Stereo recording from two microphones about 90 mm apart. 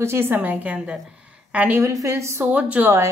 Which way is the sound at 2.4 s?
15° right (ahead or behind).